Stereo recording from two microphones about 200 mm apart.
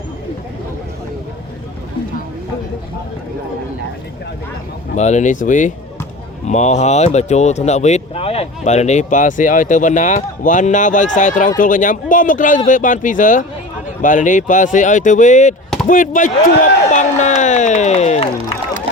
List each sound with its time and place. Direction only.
4.9 s speech: 35° left (ahead or behind)